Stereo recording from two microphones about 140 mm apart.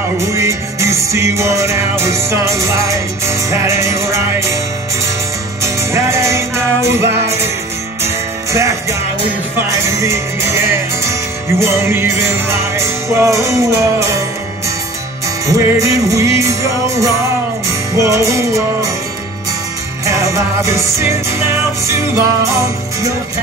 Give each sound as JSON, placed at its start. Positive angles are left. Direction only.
{"t": 0.2, "sound": "music", "side_deg": -20}
{"t": 5.6, "sound": "music", "side_deg": -20}
{"t": 9.8, "sound": "music", "side_deg": -20}
{"t": 15.4, "sound": "music", "side_deg": -25}
{"t": 20.1, "sound": "music", "side_deg": -20}